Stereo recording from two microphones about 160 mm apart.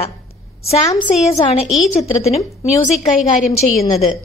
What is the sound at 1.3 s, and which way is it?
Speech, 40° left (ahead or behind).